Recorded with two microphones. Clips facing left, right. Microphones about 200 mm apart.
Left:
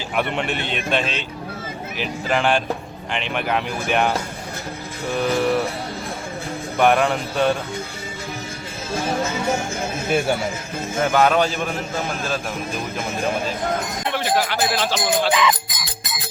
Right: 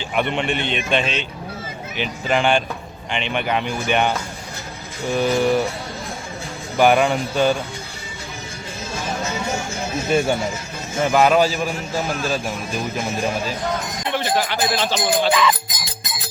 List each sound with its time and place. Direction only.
0.2 s speech: 5° left (ahead or behind)
5.1 s speech: centre (ahead or behind)
6.7 s speech: centre (ahead or behind)
9.0 s speech: 55° left (ahead or behind)
10.1 s speech: 5° left (ahead or behind)
14.1 s speech: 5° left (ahead or behind)
15.3 s speech: 15° left (ahead or behind)